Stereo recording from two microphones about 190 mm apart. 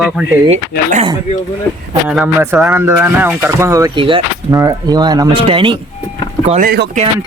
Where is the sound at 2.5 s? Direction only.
10° right (ahead or behind); by 5.7 s 25° right (ahead or behind).